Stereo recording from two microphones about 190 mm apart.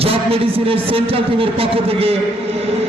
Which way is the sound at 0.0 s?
30° right (ahead or behind).